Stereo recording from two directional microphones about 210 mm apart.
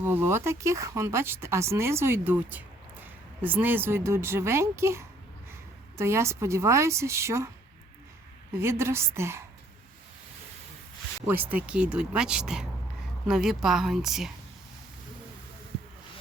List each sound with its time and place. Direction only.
0.0 s speech: 10° right (ahead or behind)
8.6 s speech: 10° right (ahead or behind)
11.3 s speech: 5° right (ahead or behind)